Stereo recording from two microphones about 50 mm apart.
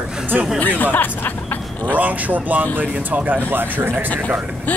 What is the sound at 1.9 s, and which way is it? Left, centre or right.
Speech, right.